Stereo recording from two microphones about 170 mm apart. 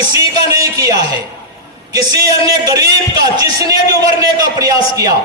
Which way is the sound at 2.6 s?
20° right (ahead or behind).